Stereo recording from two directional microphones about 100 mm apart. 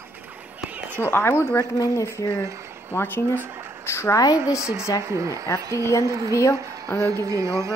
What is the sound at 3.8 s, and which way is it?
Speech, 25° left (ahead or behind).